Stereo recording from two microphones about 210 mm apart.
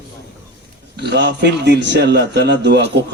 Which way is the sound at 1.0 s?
55° right (ahead or behind).